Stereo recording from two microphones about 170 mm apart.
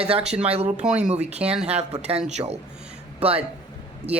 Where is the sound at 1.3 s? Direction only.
40° right (ahead or behind).